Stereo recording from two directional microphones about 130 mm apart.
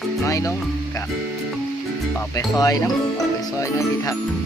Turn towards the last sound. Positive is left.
turn(degrees=25)  # may be behind; listen again after turning